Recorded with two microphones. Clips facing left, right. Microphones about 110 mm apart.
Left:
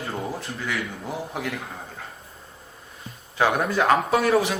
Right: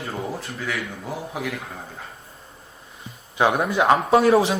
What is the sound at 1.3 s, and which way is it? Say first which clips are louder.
Speech: right 2 dB; 5° right (ahead or behind).